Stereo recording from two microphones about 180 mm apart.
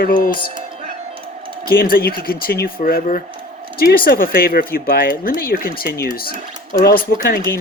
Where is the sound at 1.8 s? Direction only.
60° left (ahead or behind).